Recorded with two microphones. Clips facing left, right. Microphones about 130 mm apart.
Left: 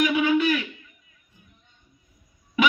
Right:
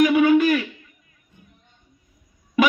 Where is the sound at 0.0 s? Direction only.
50° right (ahead or behind).